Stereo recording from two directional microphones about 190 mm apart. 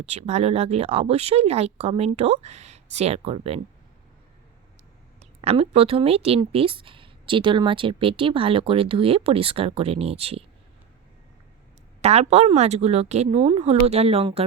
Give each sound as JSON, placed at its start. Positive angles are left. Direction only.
{"t": 0.0, "sound": "speech", "side_deg": -35}
{"t": 5.2, "sound": "a woman's voice", "side_deg": -30}
{"t": 12.0, "sound": "speech", "side_deg": -35}